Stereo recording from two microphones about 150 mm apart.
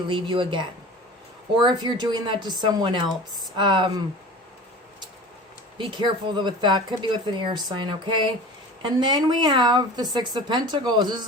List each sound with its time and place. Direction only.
0.1 s speech: 35° right (ahead or behind)
2.0 s a woman's voice: 30° right (ahead or behind)
5.7 s a woman's voice: 30° right (ahead or behind)